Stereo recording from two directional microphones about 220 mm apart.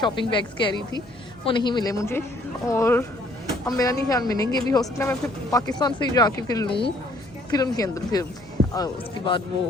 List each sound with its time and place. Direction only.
0.0 s a woman's voice: 20° left (ahead or behind)